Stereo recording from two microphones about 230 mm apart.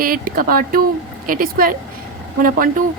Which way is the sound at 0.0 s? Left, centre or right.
Right.